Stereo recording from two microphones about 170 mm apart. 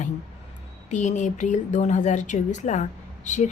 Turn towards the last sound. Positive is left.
turn(degrees=45)  # may be behind; listen again after turning